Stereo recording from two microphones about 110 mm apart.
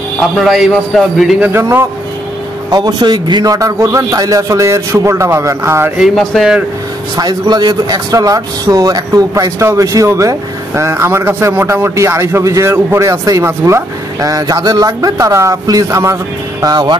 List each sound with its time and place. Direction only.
0.4 s a man's voice: centre (ahead or behind)
1.5 s speech: 25° right (ahead or behind)
2.7 s speech: 35° right (ahead or behind)
5.9 s a man's voice: centre (ahead or behind)
7.2 s speech: 40° right (ahead or behind)
16.6 s speech: 40° right (ahead or behind)